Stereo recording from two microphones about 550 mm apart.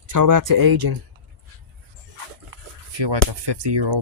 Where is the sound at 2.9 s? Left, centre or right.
Right.